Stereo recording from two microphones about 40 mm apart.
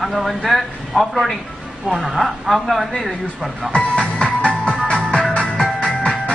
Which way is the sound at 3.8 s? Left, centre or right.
Left.